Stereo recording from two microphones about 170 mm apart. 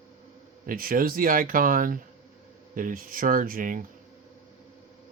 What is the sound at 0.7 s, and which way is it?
Speech, 55° right (ahead or behind).